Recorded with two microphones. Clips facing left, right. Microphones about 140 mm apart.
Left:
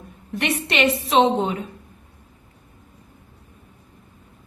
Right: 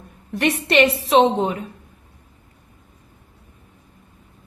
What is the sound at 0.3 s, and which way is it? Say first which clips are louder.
A woman's voice: right 5 dB; 35° right (ahead or behind).